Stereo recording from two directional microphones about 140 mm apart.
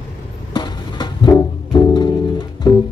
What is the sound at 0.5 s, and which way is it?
Music, 30° left (ahead or behind).